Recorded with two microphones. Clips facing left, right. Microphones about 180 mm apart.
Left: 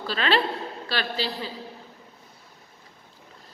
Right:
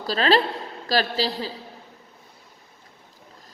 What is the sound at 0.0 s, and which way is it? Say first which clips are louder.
A woman's voice: right 4 dB; 40° right (ahead or behind).